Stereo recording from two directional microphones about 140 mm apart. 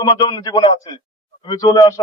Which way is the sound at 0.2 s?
30° left (ahead or behind).